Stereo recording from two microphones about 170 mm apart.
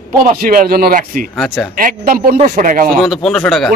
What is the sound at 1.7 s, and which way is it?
Speech, 55° right (ahead or behind).